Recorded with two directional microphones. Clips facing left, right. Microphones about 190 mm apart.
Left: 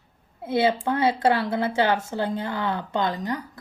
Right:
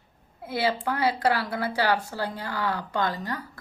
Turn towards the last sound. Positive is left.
turn(degrees=20)  # may be behind; listen again after turning